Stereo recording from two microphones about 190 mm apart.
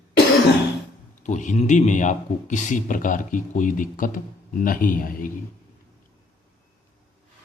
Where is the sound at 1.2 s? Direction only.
40° left (ahead or behind).